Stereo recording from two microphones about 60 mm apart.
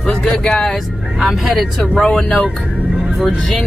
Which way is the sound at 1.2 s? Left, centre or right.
Centre.